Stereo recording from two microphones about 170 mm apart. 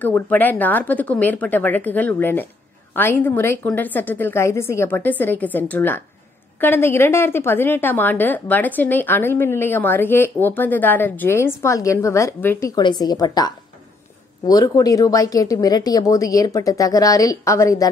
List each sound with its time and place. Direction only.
0.0 s a woman's voice: 10° left (ahead or behind)